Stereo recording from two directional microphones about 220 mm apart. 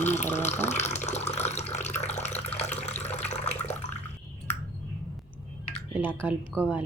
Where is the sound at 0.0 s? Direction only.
30° left (ahead or behind).